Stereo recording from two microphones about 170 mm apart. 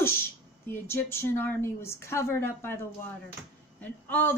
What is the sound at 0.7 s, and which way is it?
A woman's voice, 15° left (ahead or behind).